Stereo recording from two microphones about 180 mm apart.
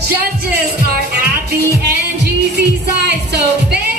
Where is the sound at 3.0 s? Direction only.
65° right (ahead or behind).